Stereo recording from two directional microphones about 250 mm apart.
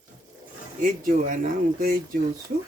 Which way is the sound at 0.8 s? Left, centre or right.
Right.